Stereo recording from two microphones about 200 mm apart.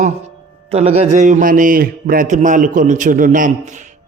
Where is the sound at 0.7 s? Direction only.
30° right (ahead or behind).